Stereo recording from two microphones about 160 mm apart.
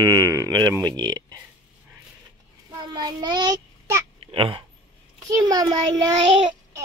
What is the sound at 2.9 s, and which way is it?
A child's voice, 25° right (ahead or behind).